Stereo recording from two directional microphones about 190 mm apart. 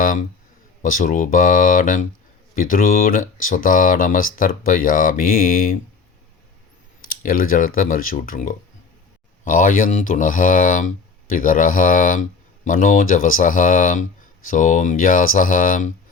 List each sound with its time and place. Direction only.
0.0 s a man's voice: 45° left (ahead or behind)
7.1 s speech: 50° left (ahead or behind)